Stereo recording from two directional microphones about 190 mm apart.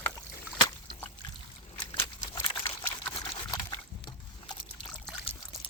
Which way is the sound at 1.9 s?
15° left (ahead or behind).